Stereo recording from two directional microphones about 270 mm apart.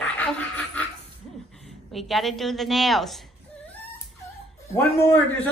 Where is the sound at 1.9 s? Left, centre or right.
Centre.